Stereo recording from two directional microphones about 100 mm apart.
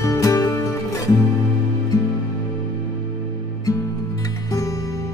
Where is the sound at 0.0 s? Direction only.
30° left (ahead or behind).